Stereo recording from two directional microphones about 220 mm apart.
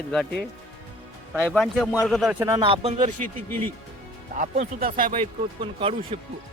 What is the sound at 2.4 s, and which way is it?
Speech, 20° right (ahead or behind).